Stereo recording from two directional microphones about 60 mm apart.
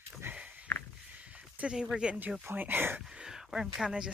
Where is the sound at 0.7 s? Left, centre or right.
Left.